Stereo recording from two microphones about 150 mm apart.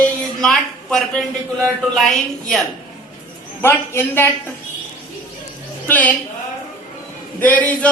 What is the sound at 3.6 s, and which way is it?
Speech, 15° left (ahead or behind).